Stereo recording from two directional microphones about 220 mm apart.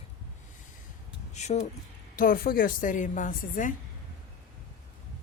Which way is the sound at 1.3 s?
30° left (ahead or behind).